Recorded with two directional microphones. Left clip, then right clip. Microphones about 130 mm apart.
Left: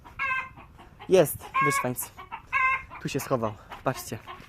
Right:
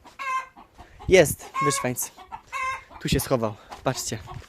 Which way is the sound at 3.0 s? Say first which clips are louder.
Right 4 dB; 30° right (ahead or behind).